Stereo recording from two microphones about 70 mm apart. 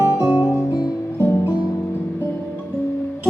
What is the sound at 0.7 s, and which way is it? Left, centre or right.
Music, left.